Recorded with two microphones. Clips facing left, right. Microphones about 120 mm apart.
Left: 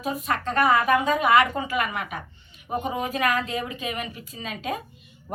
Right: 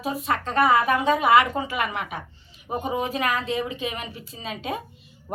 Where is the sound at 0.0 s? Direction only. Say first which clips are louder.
Right 1 dB; 30° right (ahead or behind).